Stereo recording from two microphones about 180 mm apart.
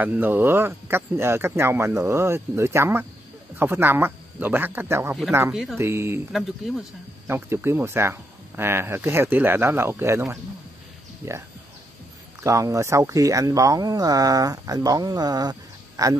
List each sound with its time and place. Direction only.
0.0 s speech: 10° right (ahead or behind)
5.5 s speech: centre (ahead or behind)
5.8 s speech: 15° right (ahead or behind)
7.2 s speech: 15° right (ahead or behind)
12.4 s speech: 15° right (ahead or behind)